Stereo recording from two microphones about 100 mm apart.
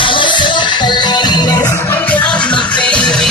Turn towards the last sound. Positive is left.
turn(degrees=10)  # may be behind; listen again after turning